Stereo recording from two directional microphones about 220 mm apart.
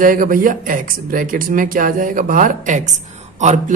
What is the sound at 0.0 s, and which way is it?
Speech, 40° right (ahead or behind).